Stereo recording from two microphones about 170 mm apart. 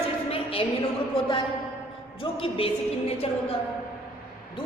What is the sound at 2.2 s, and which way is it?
Music, 30° left (ahead or behind).